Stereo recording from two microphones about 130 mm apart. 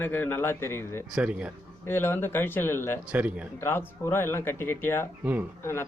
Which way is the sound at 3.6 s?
20° left (ahead or behind).